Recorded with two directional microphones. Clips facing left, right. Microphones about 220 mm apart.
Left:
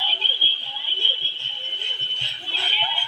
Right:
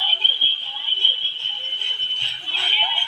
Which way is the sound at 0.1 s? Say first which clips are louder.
Left 2 dB; 30° left (ahead or behind).